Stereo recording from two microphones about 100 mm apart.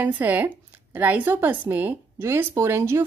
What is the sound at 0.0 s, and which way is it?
A woman's voice, 15° right (ahead or behind).